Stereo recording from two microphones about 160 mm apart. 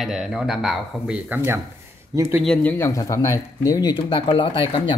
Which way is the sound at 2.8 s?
20° left (ahead or behind).